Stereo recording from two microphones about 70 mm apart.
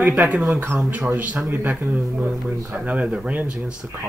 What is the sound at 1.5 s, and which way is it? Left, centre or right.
Speech, right.